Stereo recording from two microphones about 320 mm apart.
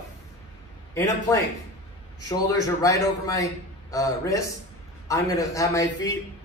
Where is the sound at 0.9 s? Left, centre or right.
Centre.